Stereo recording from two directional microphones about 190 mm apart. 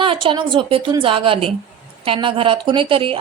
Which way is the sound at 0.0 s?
25° right (ahead or behind).